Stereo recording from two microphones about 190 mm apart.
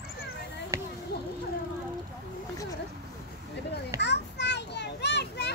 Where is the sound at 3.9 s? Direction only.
65° left (ahead or behind).